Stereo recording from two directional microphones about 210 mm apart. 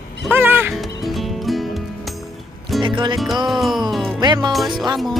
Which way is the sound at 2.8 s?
20° right (ahead or behind).